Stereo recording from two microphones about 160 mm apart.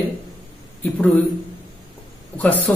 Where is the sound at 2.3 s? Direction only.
10° left (ahead or behind).